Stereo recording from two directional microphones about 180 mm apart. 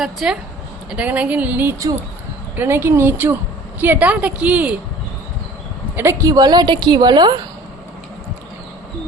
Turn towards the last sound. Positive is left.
turn(degrees=-25)  # may be behind; listen again after turning